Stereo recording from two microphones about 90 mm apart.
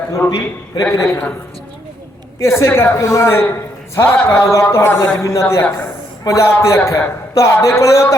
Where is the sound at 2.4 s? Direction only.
30° left (ahead or behind).